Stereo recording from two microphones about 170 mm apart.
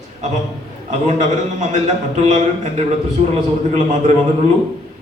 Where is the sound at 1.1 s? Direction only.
45° right (ahead or behind).